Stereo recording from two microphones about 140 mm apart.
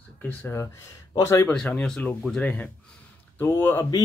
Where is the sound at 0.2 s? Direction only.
15° left (ahead or behind).